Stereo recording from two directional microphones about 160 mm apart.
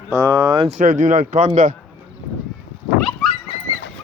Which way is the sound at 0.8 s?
55° right (ahead or behind).